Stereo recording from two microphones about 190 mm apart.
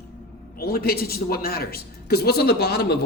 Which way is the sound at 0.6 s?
55° left (ahead or behind).